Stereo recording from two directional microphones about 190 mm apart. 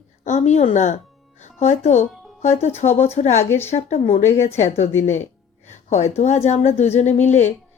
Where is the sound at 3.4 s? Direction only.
15° left (ahead or behind).